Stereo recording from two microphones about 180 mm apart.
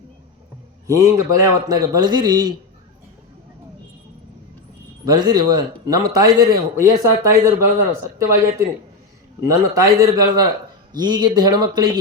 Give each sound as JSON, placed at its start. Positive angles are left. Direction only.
{"t": 0.9, "sound": "speech", "side_deg": -15}
{"t": 5.0, "sound": "speech", "side_deg": -20}